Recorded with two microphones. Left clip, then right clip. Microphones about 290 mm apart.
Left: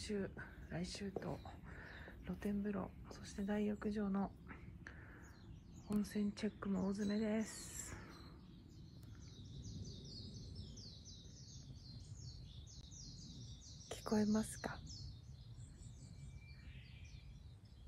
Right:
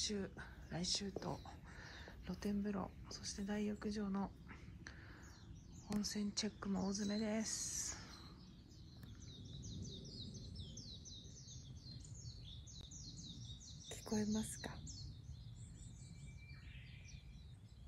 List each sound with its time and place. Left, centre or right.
0.0 s speech: centre
13.8 s speech: centre